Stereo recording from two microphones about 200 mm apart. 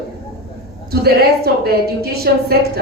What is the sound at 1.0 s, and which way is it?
A woman's voice, 50° right (ahead or behind).